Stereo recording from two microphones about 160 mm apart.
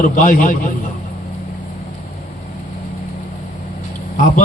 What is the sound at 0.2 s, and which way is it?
Speech, 55° left (ahead or behind).